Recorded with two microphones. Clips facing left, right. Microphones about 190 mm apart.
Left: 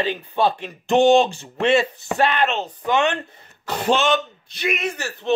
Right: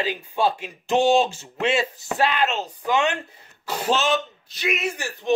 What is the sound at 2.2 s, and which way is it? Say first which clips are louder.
Speech: left 2 dB; 55° left (ahead or behind).